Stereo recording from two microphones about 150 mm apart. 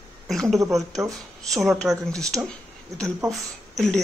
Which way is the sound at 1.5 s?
Centre (ahead or behind).